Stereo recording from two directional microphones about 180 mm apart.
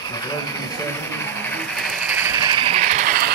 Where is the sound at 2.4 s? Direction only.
30° right (ahead or behind); by 3.3 s 50° right (ahead or behind).